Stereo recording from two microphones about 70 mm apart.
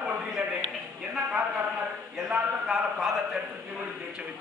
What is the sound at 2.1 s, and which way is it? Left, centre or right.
Speech, centre.